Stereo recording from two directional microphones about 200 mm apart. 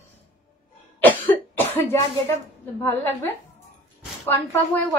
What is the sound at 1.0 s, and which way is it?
Cough, 10° left (ahead or behind).